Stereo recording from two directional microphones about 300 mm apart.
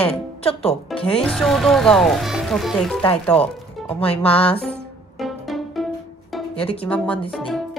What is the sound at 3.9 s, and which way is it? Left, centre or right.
Speech, centre.